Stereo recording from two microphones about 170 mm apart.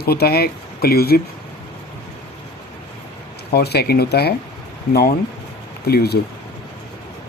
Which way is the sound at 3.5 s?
70° left (ahead or behind).